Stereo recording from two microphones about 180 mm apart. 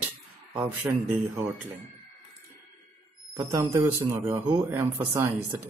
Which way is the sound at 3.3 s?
15° right (ahead or behind).